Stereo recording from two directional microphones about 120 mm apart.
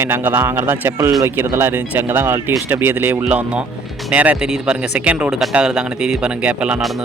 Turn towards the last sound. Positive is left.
turn(degrees=-10)  # may be behind; listen again after turning